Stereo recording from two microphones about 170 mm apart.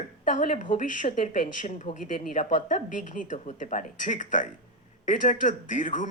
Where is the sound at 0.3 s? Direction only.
45° left (ahead or behind).